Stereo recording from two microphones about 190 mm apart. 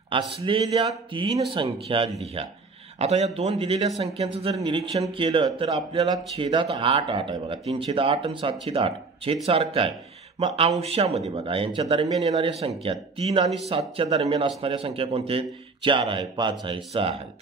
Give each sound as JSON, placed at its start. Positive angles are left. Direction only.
{"t": 0.1, "sound": "a man's voice", "side_deg": -25}